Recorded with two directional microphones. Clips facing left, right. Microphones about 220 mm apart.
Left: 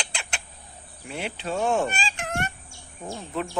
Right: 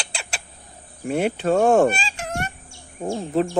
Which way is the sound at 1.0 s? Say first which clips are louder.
Right 11 dB; 50° right (ahead or behind).